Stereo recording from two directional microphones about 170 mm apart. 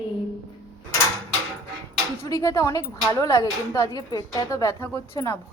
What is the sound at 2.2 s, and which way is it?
Speech, 20° left (ahead or behind).